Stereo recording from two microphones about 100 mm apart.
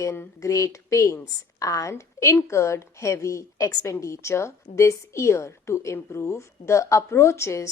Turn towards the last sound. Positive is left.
turn(degrees=30)  # may be behind; listen again after turning